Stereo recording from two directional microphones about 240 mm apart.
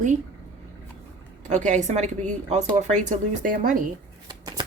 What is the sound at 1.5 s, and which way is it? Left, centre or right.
A woman's voice, right.